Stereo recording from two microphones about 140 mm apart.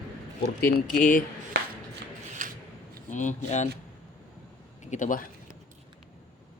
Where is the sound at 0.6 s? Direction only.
75° left (ahead or behind).